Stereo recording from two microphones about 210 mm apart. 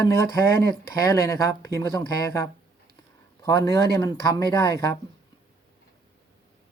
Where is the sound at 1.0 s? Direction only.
15° left (ahead or behind).